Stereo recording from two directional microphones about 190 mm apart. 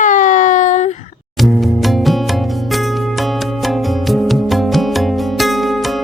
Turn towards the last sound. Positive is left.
turn(degrees=0)  # may be behind; listen again after turning